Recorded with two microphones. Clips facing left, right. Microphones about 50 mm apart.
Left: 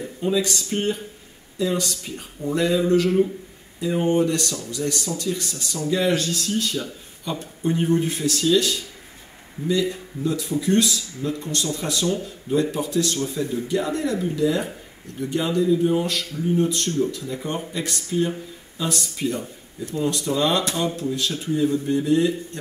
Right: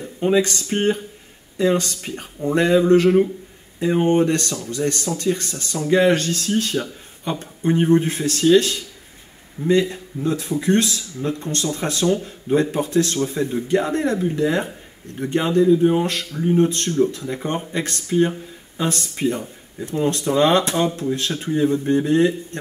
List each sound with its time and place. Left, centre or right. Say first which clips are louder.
0.2 s speech: right 5 dB; right